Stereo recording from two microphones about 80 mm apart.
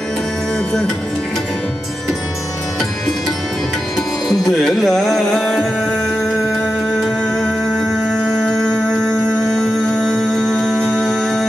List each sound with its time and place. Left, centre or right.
4.3 s music: centre
8.4 s music: centre